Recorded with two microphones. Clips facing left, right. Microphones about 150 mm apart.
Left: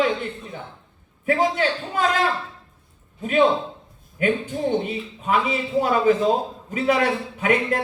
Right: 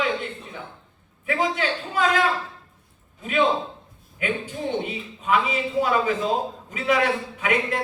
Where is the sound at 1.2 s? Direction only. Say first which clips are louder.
Left 4 dB; 45° left (ahead or behind).